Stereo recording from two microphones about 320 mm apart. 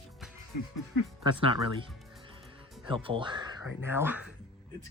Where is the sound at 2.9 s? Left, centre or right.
Centre.